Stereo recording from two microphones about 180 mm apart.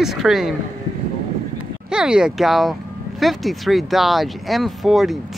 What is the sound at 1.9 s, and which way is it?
Speech, 5° right (ahead or behind).